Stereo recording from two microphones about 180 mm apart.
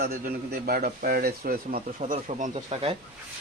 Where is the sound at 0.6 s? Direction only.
55° right (ahead or behind); by 3.0 s 35° right (ahead or behind).